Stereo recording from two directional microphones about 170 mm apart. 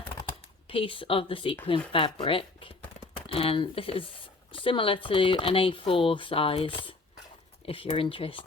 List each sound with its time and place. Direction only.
0.7 s speech: 30° left (ahead or behind)